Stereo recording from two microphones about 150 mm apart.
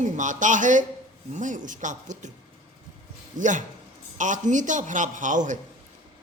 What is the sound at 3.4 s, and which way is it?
A woman's voice, 55° right (ahead or behind).